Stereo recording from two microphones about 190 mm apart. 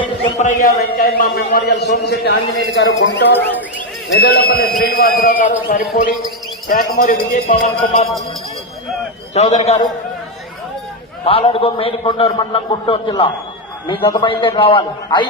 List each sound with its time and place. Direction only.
0.3 s a man's voice: 40° left (ahead or behind); by 3.2 s 70° left (ahead or behind)
3.3 s speech: 10° left (ahead or behind)
4.1 s a man's voice: 55° left (ahead or behind); by 8.1 s 40° left (ahead or behind)
9.3 s a man's voice: 35° left (ahead or behind)
11.3 s a man's voice: 30° left (ahead or behind)